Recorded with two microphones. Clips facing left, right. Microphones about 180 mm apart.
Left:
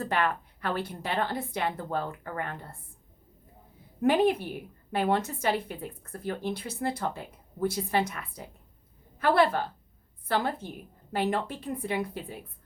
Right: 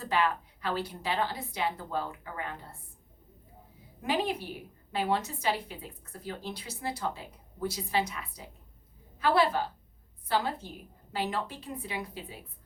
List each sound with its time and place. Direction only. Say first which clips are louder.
0.0 s a woman's voice: left 1 dB; 55° left (ahead or behind)
4.0 s a woman's voice: left 7 dB; 55° left (ahead or behind)